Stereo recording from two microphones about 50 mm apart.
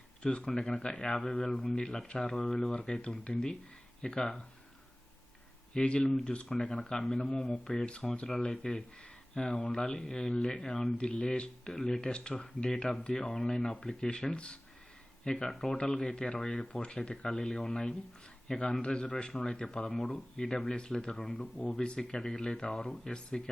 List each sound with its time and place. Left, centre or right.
0.2 s speech: centre
5.7 s speech: centre
10.9 s speech: centre
15.4 s speech: centre
15.7 s speech: centre